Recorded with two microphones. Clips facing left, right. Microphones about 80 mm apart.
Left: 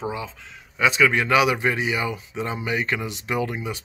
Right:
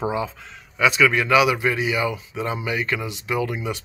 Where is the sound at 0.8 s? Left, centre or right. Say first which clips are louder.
Right 1 dB; left.